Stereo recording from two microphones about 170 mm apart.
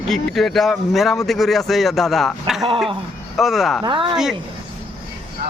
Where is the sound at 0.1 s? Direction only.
Centre (ahead or behind).